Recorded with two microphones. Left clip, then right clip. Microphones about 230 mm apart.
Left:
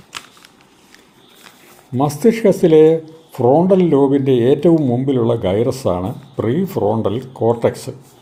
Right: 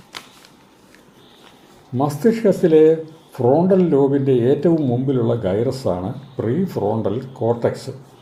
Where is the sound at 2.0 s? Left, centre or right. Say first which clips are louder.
Left 3 dB; left.